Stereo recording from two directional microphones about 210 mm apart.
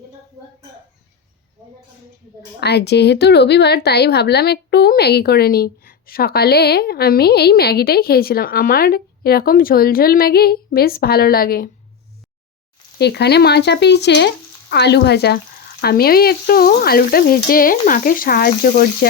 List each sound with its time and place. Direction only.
2.6 s a woman's voice: 50° left (ahead or behind)
13.0 s a woman's voice: 50° left (ahead or behind)